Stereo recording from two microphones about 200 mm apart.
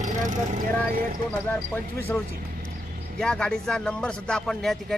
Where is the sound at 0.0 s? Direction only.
40° right (ahead or behind).